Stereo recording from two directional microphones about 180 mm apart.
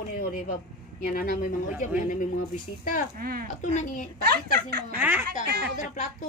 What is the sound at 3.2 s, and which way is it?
Speech, 55° right (ahead or behind).